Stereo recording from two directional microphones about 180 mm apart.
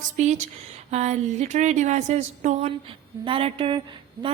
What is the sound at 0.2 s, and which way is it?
A woman's voice, 40° right (ahead or behind).